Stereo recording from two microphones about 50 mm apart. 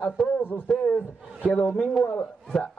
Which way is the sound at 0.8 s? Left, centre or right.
Left.